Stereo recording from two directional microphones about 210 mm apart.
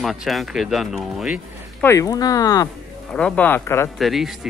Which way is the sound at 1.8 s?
15° left (ahead or behind).